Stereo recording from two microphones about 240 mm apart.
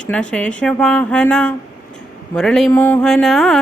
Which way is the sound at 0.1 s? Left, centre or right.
Centre.